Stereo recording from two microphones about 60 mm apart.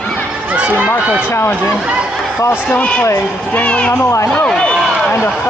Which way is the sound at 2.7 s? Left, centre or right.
Left.